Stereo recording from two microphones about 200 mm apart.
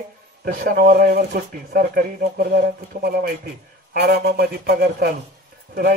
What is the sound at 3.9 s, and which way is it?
Speech, 55° right (ahead or behind).